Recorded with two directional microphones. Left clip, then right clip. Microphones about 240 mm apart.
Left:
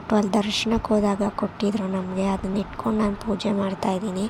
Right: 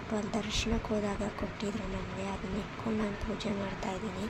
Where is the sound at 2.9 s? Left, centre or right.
Left.